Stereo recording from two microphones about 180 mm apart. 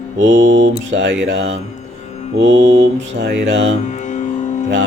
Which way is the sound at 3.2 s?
90° right.